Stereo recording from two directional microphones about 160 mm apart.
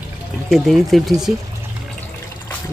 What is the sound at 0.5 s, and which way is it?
Speech, centre (ahead or behind).